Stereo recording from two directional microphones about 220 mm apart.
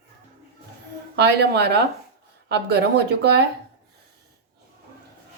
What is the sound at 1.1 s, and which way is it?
Speech, 50° right (ahead or behind).